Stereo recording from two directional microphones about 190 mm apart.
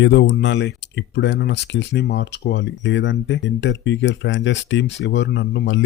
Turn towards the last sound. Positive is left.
turn(degrees=70)  # may be behind; listen again after turning